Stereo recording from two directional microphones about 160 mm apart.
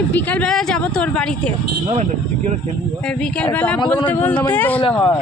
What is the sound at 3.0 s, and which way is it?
Speech, 10° left (ahead or behind).